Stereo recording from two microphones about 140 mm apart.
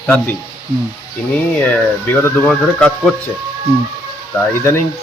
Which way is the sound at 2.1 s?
10° left (ahead or behind).